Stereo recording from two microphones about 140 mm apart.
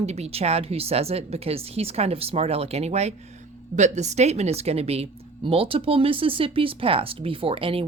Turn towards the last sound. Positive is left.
turn(degrees=-40)  # may be behind; listen again after turning